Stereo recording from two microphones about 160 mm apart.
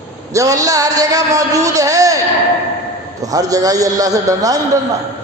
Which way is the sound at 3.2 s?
20° right (ahead or behind).